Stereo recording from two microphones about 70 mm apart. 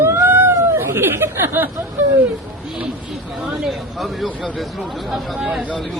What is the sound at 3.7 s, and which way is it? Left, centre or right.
Speech, centre.